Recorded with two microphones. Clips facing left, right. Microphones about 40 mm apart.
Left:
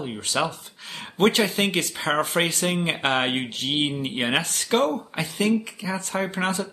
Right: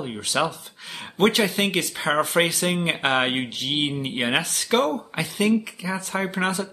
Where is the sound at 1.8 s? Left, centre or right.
Right.